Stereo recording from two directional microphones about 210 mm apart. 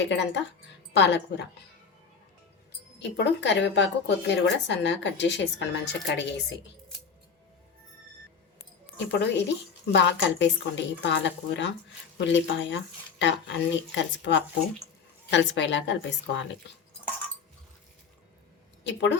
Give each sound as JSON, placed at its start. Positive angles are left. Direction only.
{"t": 0.1, "sound": "a woman's voice", "side_deg": 55}
{"t": 3.0, "sound": "speech", "side_deg": 55}
{"t": 9.0, "sound": "speech", "side_deg": 55}
{"t": 18.9, "sound": "speech", "side_deg": 55}